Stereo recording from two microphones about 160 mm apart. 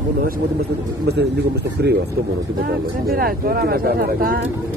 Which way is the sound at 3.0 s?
70° right (ahead or behind).